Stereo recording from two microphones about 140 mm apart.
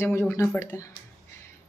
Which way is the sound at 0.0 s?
20° left (ahead or behind).